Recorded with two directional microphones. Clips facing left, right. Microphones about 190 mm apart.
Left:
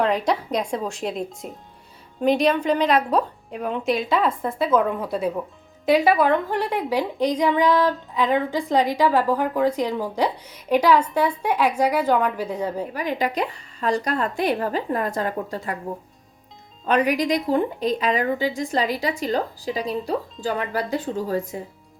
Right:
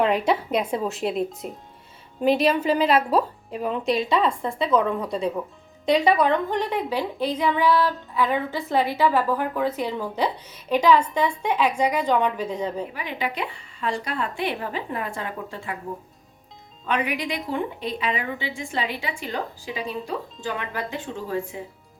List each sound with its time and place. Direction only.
0.0 s a woman's voice: 5° right (ahead or behind)
12.9 s a woman's voice: 40° left (ahead or behind)
16.8 s a woman's voice: 40° left (ahead or behind)